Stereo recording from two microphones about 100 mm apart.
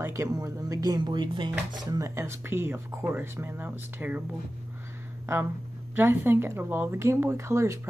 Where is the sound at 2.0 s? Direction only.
30° right (ahead or behind).